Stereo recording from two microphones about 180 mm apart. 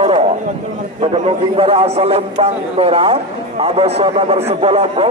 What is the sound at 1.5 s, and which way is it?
A man's voice, 35° right (ahead or behind).